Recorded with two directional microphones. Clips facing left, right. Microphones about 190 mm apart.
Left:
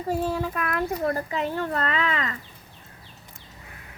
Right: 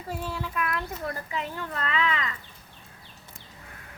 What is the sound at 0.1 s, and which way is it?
Speech, 45° left (ahead or behind).